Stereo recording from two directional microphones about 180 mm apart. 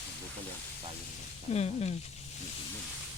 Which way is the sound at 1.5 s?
35° left (ahead or behind).